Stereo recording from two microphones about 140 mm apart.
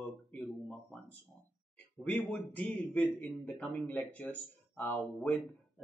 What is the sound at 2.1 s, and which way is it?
Speech, 10° left (ahead or behind).